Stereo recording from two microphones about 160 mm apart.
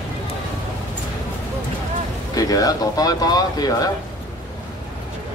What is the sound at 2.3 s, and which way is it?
Speech, 25° left (ahead or behind).